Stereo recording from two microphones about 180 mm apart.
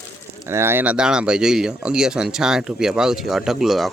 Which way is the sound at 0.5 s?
15° right (ahead or behind).